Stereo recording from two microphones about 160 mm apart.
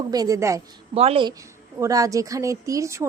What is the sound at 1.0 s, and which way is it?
Speech, 35° right (ahead or behind).